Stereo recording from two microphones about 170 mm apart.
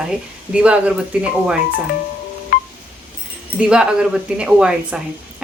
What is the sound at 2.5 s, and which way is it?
Wind chime, 60° left (ahead or behind).